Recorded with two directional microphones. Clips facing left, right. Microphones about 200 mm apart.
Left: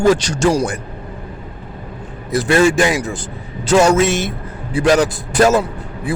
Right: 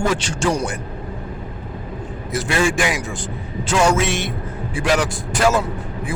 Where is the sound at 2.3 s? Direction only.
40° left (ahead or behind).